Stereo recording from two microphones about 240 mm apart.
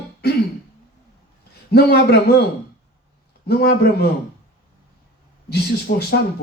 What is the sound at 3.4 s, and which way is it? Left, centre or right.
Speech, left.